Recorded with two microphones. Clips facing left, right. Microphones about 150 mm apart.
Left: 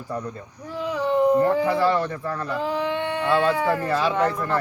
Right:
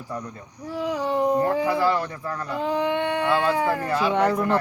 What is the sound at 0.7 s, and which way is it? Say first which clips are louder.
Speech: left 1 dB; 15° right (ahead or behind).